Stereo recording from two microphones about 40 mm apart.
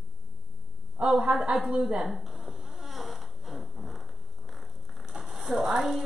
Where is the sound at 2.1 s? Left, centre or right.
Centre.